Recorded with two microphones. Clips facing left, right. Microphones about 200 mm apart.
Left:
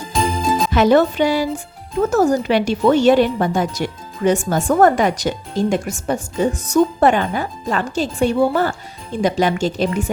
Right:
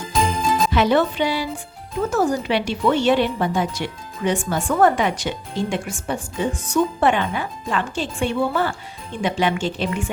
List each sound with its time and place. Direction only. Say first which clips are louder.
0.7 s a woman's voice: left 7 dB; 45° left (ahead or behind)